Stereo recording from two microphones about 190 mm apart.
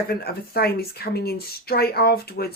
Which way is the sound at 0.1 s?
55° left (ahead or behind).